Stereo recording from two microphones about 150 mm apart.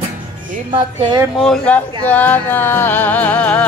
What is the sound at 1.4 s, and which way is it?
Speech, 5° left (ahead or behind).